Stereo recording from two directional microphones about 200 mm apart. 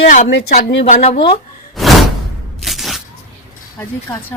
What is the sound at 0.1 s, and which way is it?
A woman's voice, 40° left (ahead or behind).